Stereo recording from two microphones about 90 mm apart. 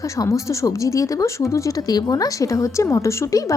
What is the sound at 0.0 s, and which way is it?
A woman's voice, 35° left (ahead or behind).